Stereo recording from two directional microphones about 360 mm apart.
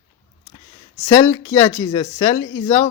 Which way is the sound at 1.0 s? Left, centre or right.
Centre.